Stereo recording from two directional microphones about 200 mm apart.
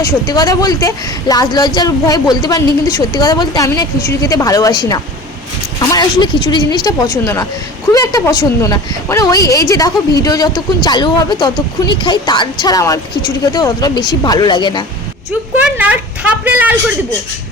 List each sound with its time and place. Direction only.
0.0 s a woman's voice: 20° left (ahead or behind)
15.6 s speech: 5° right (ahead or behind)